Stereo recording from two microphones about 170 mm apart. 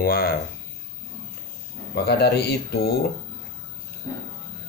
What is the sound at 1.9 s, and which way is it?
Speech, 70° left (ahead or behind).